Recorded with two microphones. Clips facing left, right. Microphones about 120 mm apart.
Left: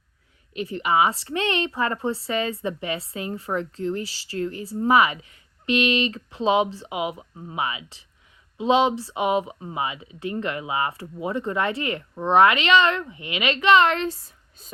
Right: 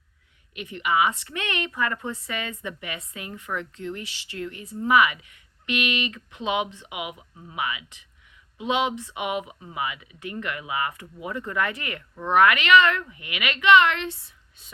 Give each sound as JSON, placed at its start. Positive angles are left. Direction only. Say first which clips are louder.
{"t": 0.5, "sound": "a woman's voice", "louder": "left 3 dB", "side_deg": 35}